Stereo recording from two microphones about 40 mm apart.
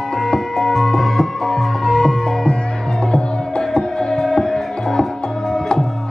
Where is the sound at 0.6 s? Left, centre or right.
Centre.